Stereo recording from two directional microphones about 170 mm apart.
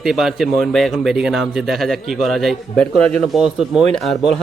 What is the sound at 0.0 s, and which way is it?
A man's voice, centre (ahead or behind).